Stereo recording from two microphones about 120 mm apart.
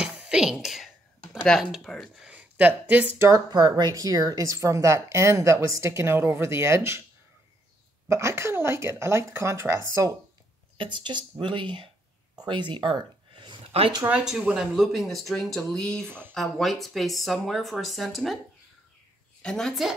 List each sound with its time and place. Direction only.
0.0 s speech: 5° right (ahead or behind)
3.3 s speech: 30° right (ahead or behind)
8.1 s speech: 25° right (ahead or behind)
10.8 s speech: 40° right (ahead or behind)
13.7 s speech: 55° right (ahead or behind)
14.0 s speech: 5° right (ahead or behind)
19.4 s speech: 5° left (ahead or behind)